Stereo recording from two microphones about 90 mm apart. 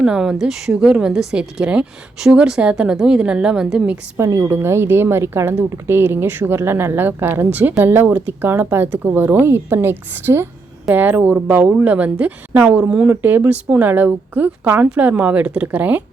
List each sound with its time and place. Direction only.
0.0 s speech: 10° right (ahead or behind)
4.2 s speech: 30° right (ahead or behind)